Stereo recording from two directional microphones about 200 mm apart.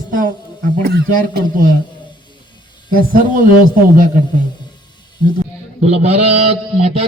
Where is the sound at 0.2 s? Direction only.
45° right (ahead or behind).